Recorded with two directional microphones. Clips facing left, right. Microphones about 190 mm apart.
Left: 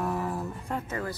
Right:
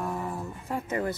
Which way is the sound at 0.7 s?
20° right (ahead or behind).